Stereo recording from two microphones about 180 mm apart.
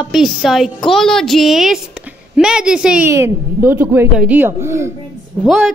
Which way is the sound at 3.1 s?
15° right (ahead or behind).